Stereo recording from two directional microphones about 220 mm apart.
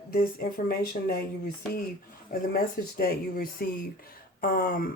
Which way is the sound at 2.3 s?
45° left (ahead or behind).